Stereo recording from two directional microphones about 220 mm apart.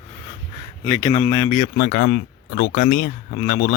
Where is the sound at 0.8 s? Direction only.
10° left (ahead or behind).